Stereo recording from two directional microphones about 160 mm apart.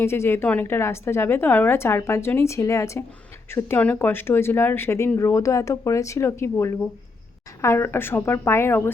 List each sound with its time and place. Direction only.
0.0 s speech: 15° left (ahead or behind)